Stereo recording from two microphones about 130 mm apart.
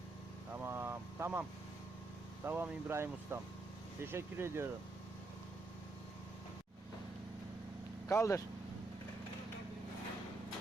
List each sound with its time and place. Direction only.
0.5 s vehicle: 15° right (ahead or behind)
2.4 s speech: 15° right (ahead or behind)
8.0 s speech: 25° left (ahead or behind)